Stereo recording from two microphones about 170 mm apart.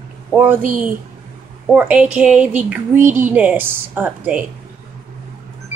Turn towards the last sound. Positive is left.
turn(degrees=-10)  # may be behind; listen again after turning